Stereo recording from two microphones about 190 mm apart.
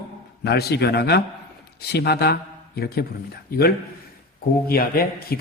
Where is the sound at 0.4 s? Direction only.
60° left (ahead or behind).